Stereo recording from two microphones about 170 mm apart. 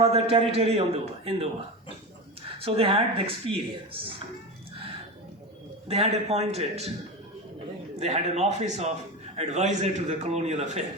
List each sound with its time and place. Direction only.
0.0 s speech: 35° right (ahead or behind)
2.6 s speech: 35° right (ahead or behind)
5.9 s speech: 40° right (ahead or behind)
7.9 s speech: 40° right (ahead or behind)